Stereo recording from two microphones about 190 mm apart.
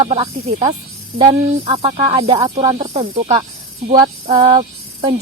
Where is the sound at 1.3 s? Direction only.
35° right (ahead or behind).